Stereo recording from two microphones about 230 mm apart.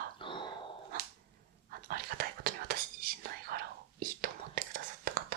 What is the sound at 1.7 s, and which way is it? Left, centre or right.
Whispering, right.